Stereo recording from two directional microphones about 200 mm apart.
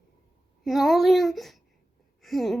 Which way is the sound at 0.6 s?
Centre (ahead or behind).